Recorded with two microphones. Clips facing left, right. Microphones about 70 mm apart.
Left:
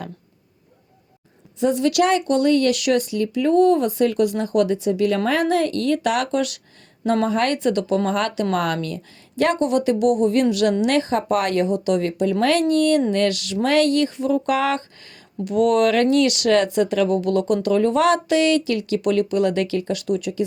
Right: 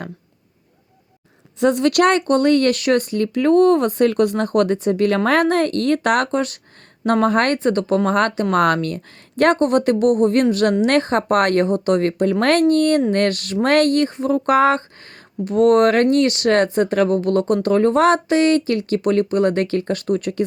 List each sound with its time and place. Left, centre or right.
1.5 s speech: right
7.0 s speech: right